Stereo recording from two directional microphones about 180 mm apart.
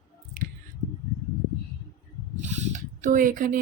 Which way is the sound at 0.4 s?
50° right (ahead or behind).